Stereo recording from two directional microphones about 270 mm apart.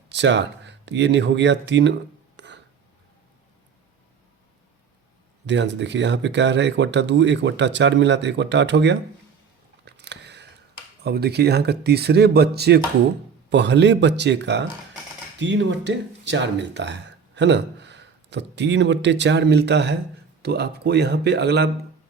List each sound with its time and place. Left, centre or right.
0.1 s speech: right
5.5 s speech: right
9.8 s chewing: right
11.0 s speech: right